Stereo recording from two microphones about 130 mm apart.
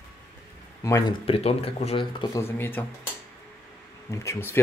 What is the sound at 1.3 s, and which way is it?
Speech, 50° left (ahead or behind).